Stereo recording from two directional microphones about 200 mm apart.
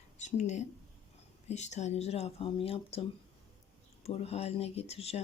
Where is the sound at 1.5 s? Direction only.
35° left (ahead or behind).